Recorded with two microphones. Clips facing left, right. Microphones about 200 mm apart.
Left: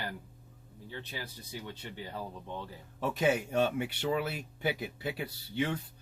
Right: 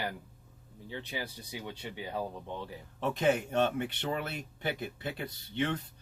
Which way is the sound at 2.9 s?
10° left (ahead or behind).